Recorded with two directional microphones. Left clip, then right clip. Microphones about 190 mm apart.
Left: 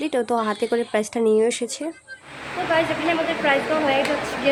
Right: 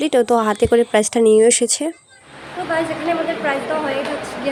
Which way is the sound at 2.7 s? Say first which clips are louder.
Right 1 dB; 10° right (ahead or behind).